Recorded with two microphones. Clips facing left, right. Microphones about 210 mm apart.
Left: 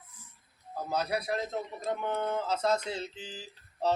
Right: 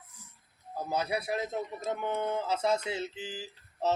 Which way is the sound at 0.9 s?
10° right (ahead or behind).